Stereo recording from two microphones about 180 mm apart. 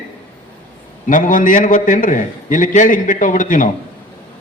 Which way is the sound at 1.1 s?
50° left (ahead or behind).